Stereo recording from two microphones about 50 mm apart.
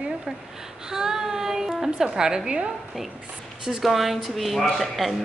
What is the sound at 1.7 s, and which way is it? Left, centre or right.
Speech, centre.